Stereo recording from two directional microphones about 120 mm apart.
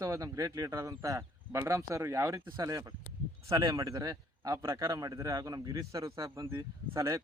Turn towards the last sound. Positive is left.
turn(degrees=-25)  # may be behind; listen again after turning